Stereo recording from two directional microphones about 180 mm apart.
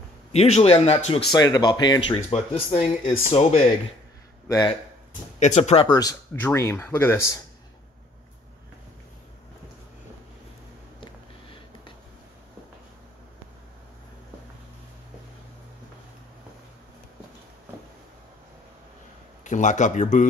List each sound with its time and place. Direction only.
0.3 s speech: 35° left (ahead or behind)
1.3 s speech: 20° left (ahead or behind)
4.5 s speech: 25° left (ahead or behind)
5.4 s speech: 40° left (ahead or behind); by 7.3 s 15° left (ahead or behind)
19.4 s speech: 45° left (ahead or behind)